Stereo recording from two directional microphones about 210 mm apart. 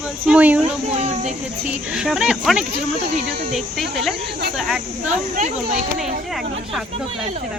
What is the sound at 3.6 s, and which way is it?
Speech, centre (ahead or behind).